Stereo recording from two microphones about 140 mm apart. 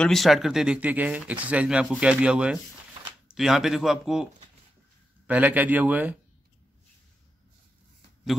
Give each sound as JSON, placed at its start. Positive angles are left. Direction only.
{"t": 0.0, "sound": "a man's voice", "side_deg": 0}